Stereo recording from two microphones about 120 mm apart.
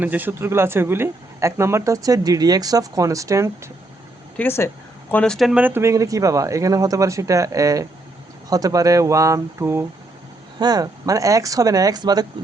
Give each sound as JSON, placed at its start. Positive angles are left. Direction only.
{"t": 0.0, "sound": "speech", "side_deg": -15}
{"t": 4.4, "sound": "speech", "side_deg": 20}
{"t": 5.1, "sound": "speech", "side_deg": 5}
{"t": 5.5, "sound": "speech", "side_deg": -15}
{"t": 10.6, "sound": "speech", "side_deg": -35}